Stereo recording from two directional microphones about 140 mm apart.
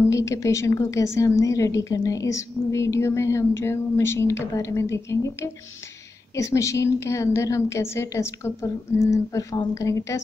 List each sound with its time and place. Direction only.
0.1 s a woman's voice: 20° left (ahead or behind)